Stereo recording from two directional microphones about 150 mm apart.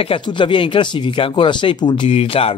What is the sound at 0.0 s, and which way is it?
Speech, 35° left (ahead or behind).